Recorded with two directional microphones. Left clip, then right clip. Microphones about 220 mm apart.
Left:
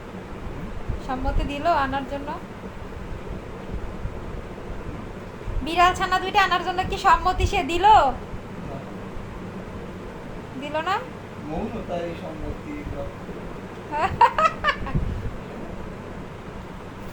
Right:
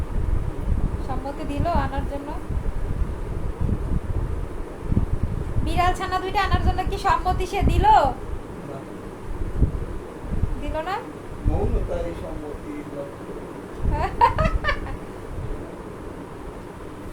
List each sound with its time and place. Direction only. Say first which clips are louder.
1.6 s a woman's voice: left 4 dB; 20° left (ahead or behind)
5.6 s a woman's voice: left 4 dB; 20° left (ahead or behind)
10.8 s a woman's voice: left 3 dB; 20° left (ahead or behind)
14.0 s a sound: left 2 dB; 20° left (ahead or behind)